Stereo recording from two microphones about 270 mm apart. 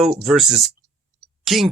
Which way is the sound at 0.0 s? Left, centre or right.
Centre.